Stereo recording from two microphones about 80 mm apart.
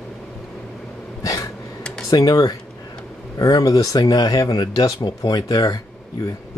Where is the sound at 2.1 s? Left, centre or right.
Left.